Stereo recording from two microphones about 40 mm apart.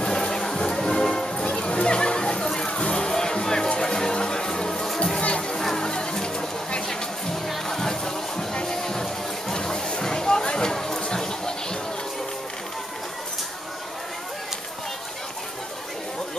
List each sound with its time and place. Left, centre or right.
0.0 s music: centre
5.2 s music: left
5.6 s music: centre
11.1 s a sound: centre